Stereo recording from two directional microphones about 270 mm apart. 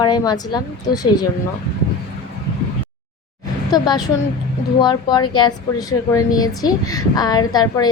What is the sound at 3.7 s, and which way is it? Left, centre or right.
A woman's voice, centre.